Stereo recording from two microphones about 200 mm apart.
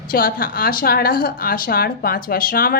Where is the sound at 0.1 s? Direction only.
45° left (ahead or behind).